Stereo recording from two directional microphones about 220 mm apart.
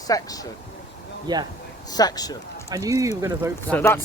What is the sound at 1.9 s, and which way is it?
Speech, 15° left (ahead or behind).